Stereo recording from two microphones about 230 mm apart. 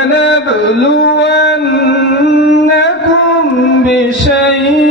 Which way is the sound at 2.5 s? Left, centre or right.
Left.